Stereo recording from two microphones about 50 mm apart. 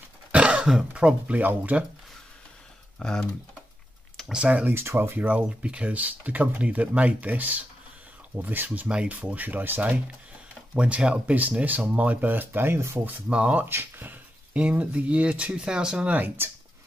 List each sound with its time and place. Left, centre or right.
0.3 s speech: right
3.0 s speech: centre
4.6 s speech: right
5.2 s speech: right
8.8 s speech: right
9.1 s speech: right
10.7 s speech: right
13.3 s speech: right
13.7 s speech: right
14.5 s speech: right
16.4 s speech: right